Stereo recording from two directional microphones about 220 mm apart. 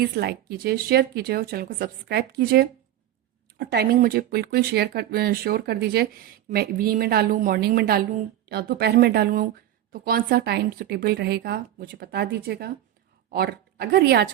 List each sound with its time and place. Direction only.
0.0 s a woman's voice: 45° right (ahead or behind)